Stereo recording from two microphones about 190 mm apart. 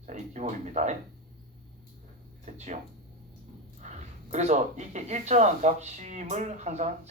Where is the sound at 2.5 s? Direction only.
35° right (ahead or behind).